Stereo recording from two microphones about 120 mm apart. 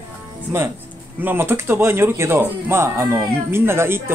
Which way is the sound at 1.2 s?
20° right (ahead or behind).